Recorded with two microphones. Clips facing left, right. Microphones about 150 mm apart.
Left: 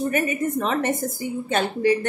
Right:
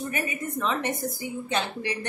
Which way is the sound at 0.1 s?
45° left (ahead or behind).